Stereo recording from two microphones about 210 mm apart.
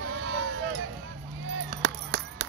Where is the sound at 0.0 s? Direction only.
65° right (ahead or behind).